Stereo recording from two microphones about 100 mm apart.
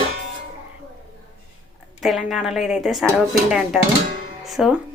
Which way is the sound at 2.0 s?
5° right (ahead or behind).